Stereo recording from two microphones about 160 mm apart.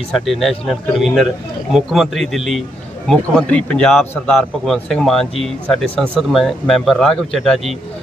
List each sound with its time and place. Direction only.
0.1 s speech: centre (ahead or behind)